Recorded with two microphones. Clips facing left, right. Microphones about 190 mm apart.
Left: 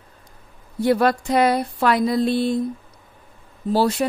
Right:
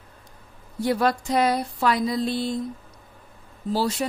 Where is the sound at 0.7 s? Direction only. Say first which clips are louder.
Left 4 dB; 60° left (ahead or behind).